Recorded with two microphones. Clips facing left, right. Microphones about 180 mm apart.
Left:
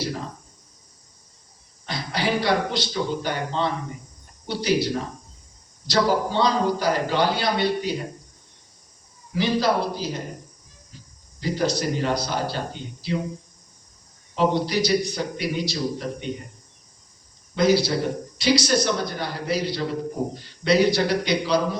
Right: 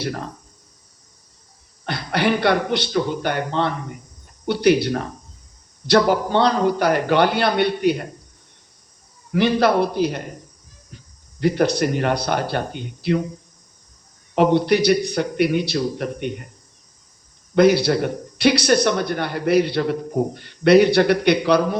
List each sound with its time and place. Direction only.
1.8 s a man's voice: 60° right (ahead or behind)
9.3 s a man's voice: 60° right (ahead or behind)
14.3 s a man's voice: 60° right (ahead or behind)
17.5 s a man's voice: 60° right (ahead or behind)